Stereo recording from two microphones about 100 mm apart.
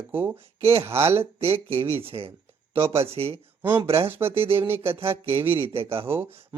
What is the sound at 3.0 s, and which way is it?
Speech, 85° right.